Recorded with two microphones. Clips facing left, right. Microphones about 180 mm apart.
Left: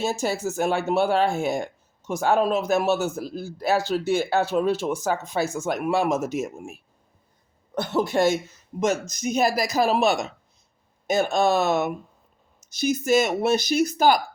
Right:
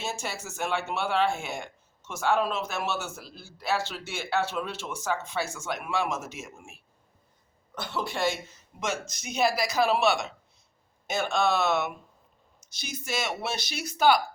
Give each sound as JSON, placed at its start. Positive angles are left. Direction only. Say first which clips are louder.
{"t": 0.0, "sound": "speech", "louder": "left 10 dB", "side_deg": 40}
{"t": 7.9, "sound": "speech", "louder": "left 8 dB", "side_deg": 45}